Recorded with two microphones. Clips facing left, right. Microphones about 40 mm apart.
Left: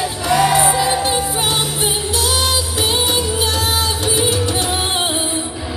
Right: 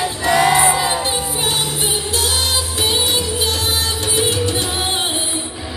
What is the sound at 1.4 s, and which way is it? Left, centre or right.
Music, left.